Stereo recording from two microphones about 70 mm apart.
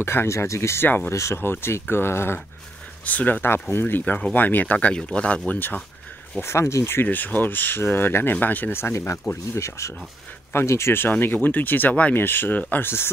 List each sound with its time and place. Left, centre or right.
0.0 s speech: left
1.1 s speech: left
3.1 s speech: left
5.5 s speech: left
6.4 s speech: left
8.9 s speech: left